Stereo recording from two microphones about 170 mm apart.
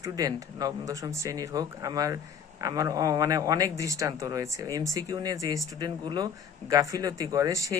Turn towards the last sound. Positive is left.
turn(degrees=-20)  # may be behind; listen again after turning